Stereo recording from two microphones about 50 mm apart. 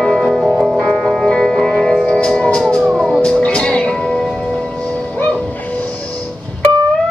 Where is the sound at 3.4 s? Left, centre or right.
Left.